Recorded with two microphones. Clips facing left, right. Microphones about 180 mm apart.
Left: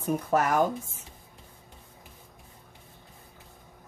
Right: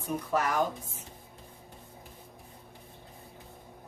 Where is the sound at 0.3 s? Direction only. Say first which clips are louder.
Left 4 dB; 50° left (ahead or behind).